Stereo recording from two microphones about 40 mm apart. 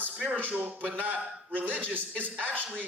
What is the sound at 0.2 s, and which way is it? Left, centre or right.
A man's voice, right.